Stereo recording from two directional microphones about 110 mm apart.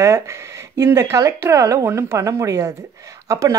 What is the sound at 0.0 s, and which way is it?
Speech, 25° right (ahead or behind).